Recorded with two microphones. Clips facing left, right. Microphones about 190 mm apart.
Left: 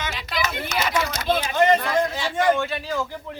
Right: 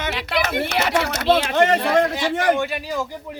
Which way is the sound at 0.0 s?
70° right (ahead or behind).